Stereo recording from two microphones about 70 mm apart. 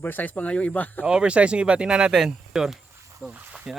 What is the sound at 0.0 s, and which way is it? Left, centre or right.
A man's voice, left.